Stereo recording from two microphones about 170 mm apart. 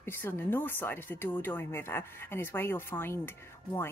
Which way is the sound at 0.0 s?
15° left (ahead or behind).